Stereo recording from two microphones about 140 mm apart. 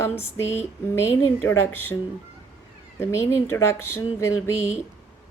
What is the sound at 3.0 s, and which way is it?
Speech, 15° left (ahead or behind).